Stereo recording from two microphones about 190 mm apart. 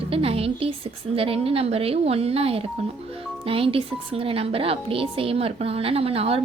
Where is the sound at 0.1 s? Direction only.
30° right (ahead or behind).